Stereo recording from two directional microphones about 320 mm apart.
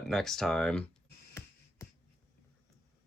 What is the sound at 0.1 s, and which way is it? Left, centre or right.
Speech, centre.